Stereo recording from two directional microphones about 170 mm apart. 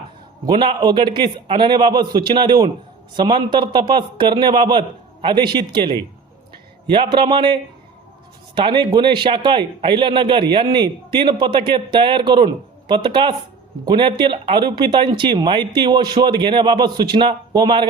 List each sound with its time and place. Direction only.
0.4 s speech: 30° right (ahead or behind)